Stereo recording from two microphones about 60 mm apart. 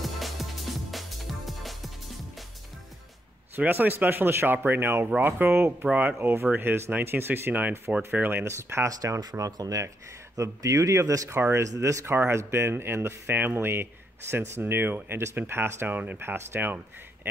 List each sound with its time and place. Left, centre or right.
0.0 s music: centre
3.5 s speech: right
5.9 s speech: right
8.5 s speech: right
9.2 s speech: right
11.2 s speech: right
11.6 s speech: right